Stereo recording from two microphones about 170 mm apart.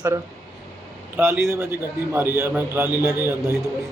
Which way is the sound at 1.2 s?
15° right (ahead or behind).